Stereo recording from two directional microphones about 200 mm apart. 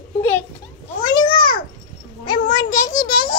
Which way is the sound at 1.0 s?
20° left (ahead or behind).